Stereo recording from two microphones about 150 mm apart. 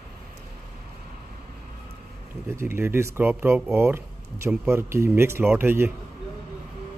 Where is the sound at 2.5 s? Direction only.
15° right (ahead or behind).